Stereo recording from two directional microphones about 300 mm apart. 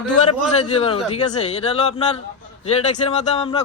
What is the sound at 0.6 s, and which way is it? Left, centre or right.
Speech, centre.